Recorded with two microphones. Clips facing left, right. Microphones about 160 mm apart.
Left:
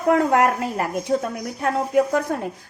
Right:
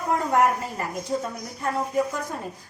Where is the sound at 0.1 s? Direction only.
75° left (ahead or behind).